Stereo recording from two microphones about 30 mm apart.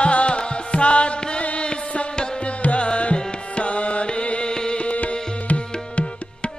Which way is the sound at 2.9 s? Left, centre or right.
Left.